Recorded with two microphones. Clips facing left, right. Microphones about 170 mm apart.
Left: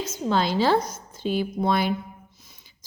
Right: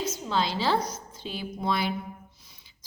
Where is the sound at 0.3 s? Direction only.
50° left (ahead or behind).